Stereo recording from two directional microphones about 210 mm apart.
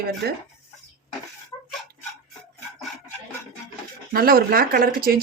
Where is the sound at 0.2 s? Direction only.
50° right (ahead or behind).